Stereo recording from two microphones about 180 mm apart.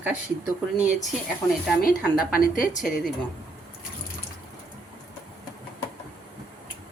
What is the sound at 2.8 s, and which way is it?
Speech, centre (ahead or behind).